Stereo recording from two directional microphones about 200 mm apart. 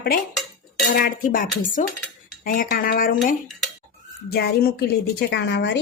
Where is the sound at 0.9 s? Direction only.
45° left (ahead or behind).